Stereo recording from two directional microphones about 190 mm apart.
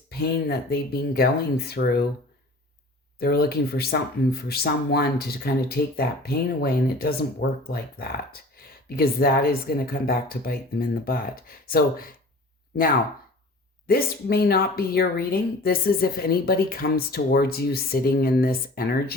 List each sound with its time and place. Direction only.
0.1 s speech: 55° left (ahead or behind)
3.2 s speech: 55° left (ahead or behind)
13.8 s speech: 55° left (ahead or behind)